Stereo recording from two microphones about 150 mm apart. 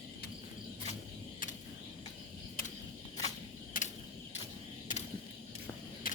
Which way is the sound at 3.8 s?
60° left (ahead or behind).